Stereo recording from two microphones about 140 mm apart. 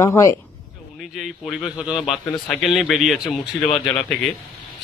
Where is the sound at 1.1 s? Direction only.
Centre (ahead or behind).